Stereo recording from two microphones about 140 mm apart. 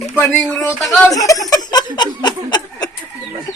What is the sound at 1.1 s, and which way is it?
Chicken, 25° left (ahead or behind).